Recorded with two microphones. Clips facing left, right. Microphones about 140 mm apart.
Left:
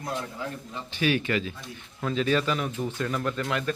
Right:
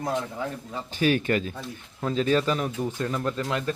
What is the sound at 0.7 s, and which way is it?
Speech, 40° right (ahead or behind).